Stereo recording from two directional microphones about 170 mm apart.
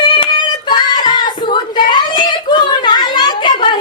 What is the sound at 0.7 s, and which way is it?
Child singing, 25° left (ahead or behind).